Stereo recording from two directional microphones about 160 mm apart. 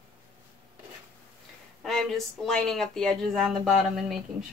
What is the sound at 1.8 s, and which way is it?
Speech, centre (ahead or behind).